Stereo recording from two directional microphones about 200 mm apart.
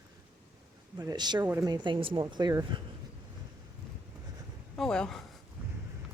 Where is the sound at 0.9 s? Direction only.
20° right (ahead or behind).